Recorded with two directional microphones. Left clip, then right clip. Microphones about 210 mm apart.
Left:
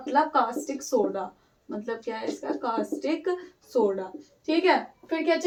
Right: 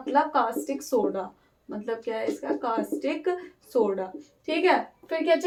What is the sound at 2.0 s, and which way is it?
A woman's voice, 30° right (ahead or behind).